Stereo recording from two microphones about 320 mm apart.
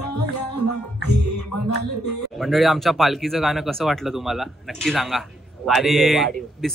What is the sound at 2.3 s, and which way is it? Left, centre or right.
A man's voice, centre.